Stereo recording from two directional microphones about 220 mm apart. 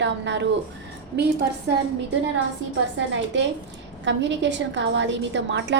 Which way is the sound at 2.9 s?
55° right (ahead or behind).